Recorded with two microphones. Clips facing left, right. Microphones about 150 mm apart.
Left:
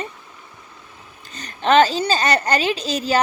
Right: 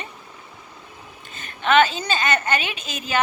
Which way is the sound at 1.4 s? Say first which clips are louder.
Left 3 dB; 40° left (ahead or behind).